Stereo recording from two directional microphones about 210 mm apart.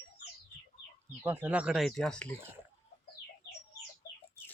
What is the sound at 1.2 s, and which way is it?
A man's voice, 10° right (ahead or behind).